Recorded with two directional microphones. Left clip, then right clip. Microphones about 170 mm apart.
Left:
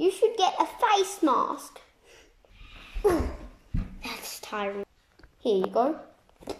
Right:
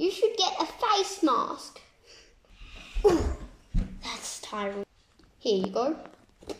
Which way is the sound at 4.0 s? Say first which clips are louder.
Even; 15° left (ahead or behind).